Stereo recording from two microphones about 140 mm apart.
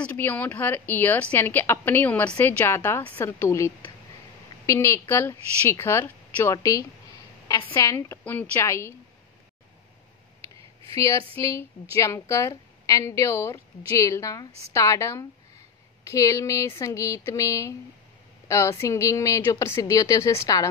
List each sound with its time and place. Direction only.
0.0 s a woman's voice: 10° left (ahead or behind)
11.1 s speech: 45° right (ahead or behind)
11.4 s a woman's voice: 20° left (ahead or behind)